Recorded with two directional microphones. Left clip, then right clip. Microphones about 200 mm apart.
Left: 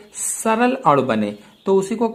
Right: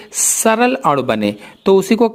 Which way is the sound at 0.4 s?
40° right (ahead or behind).